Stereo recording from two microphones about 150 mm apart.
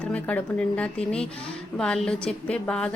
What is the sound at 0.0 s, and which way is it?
A woman's voice, 10° left (ahead or behind).